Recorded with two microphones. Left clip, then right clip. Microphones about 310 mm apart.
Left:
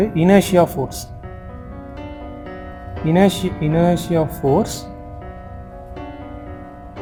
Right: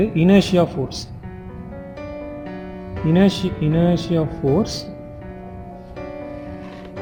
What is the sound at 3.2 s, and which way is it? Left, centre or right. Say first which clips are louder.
A man's voice: left 2 dB; left.